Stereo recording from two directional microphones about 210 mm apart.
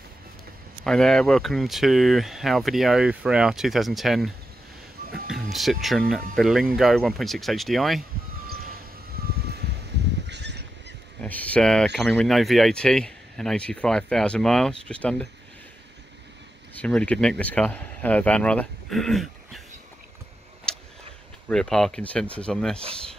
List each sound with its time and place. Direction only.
0.8 s speech: 5° left (ahead or behind)
5.3 s speech: centre (ahead or behind)
9.2 s reversing beeps: 50° right (ahead or behind)
10.2 s goose: 55° right (ahead or behind)
11.1 s speech: 5° left (ahead or behind)
16.8 s speech: 5° left (ahead or behind)
20.7 s vehicle: 5° left (ahead or behind)
21.5 s speech: centre (ahead or behind)